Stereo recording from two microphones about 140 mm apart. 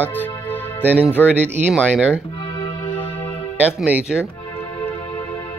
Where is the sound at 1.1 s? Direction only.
10° right (ahead or behind).